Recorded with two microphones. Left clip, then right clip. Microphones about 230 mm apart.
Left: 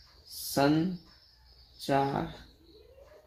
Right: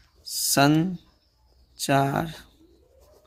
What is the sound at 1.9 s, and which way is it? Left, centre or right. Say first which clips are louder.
Speech: right 6 dB; right.